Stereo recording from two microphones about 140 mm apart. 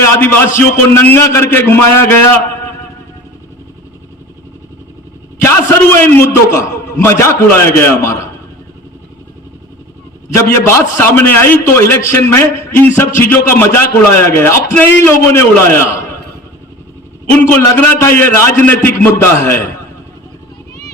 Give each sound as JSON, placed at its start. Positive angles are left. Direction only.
{"t": 0.0, "sound": "a man's voice", "side_deg": 15}
{"t": 5.4, "sound": "a man's voice", "side_deg": 20}
{"t": 10.2, "sound": "a man's voice", "side_deg": 20}
{"t": 17.6, "sound": "a man's voice", "side_deg": 15}